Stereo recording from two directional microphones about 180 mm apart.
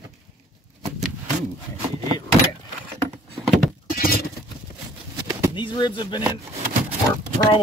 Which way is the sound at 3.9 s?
55° left (ahead or behind).